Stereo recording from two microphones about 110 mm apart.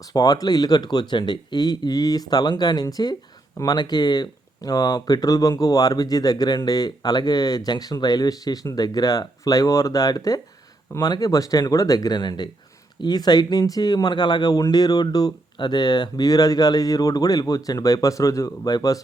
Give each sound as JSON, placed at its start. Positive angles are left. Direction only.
{"t": 0.1, "sound": "speech", "side_deg": 35}